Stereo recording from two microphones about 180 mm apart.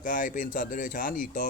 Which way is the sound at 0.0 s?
50° left (ahead or behind).